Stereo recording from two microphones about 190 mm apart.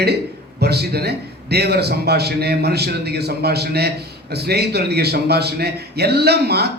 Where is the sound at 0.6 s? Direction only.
55° right (ahead or behind).